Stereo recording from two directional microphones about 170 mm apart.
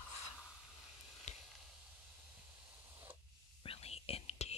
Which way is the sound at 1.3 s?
45° left (ahead or behind).